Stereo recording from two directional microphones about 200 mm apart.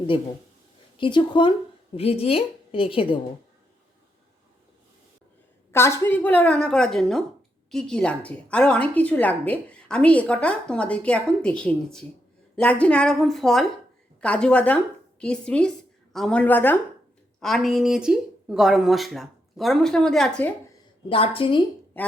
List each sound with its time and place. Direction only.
0.9 s a woman's voice: 25° left (ahead or behind)
5.7 s a woman's voice: 15° left (ahead or behind)
21.1 s a woman's voice: 25° left (ahead or behind)
22.0 s speech: 10° left (ahead or behind)